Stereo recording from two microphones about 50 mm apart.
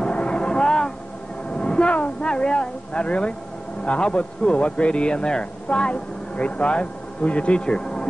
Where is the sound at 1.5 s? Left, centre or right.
Left.